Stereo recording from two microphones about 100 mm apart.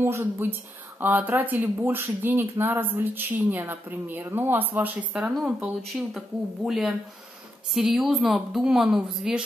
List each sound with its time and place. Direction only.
0.0 s a woman's voice: 20° right (ahead or behind)
5.3 s speech: centre (ahead or behind)